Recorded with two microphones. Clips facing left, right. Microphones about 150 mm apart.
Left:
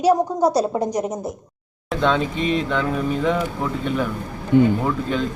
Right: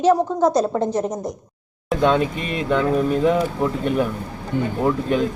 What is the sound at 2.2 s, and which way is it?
Speech, 50° right (ahead or behind).